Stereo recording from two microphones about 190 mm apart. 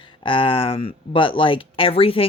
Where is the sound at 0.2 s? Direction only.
25° left (ahead or behind).